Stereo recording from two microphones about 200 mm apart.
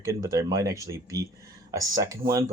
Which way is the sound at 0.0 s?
15° right (ahead or behind).